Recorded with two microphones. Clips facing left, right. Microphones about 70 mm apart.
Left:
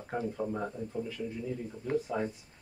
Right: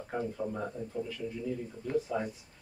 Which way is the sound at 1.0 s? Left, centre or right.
Centre.